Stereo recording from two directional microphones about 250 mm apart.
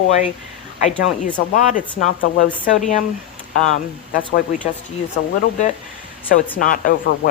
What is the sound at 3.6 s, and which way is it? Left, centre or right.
Speech, left.